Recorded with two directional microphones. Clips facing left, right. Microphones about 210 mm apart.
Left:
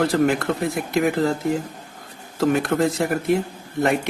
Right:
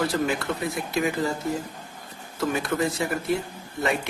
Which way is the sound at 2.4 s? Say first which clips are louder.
Left 6 dB; 55° left (ahead or behind).